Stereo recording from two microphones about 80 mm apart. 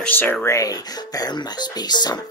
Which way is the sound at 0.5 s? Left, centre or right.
Left.